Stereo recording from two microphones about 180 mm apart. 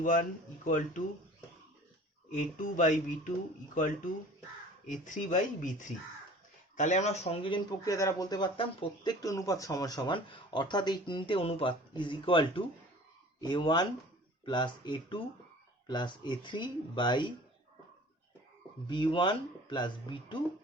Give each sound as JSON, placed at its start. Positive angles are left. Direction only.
{"t": 0.0, "sound": "speech", "side_deg": 45}
{"t": 2.3, "sound": "speech", "side_deg": 45}
{"t": 4.9, "sound": "speech", "side_deg": 45}
{"t": 7.9, "sound": "speech", "side_deg": 15}
{"t": 18.9, "sound": "speech", "side_deg": 25}